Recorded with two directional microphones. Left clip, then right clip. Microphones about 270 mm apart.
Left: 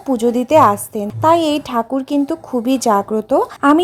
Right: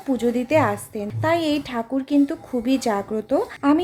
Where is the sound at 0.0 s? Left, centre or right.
Centre.